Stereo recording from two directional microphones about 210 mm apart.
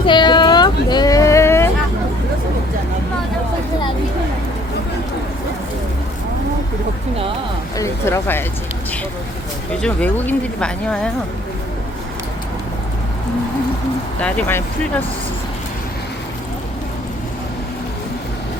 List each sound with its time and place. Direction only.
0.0 s a sound: 20° left (ahead or behind)
7.8 s speech: 15° left (ahead or behind)
9.8 s speech: 5° left (ahead or behind)
14.2 s speech: 5° left (ahead or behind)